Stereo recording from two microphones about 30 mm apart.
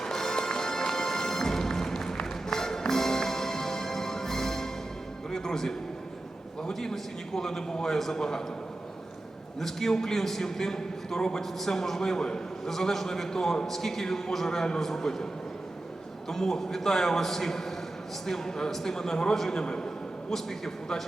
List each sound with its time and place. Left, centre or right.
0.0 s music: centre
7.3 s a man's voice: centre
9.6 s a man's voice: centre
12.6 s a man's voice: centre
16.3 s a man's voice: centre
20.3 s a man's voice: centre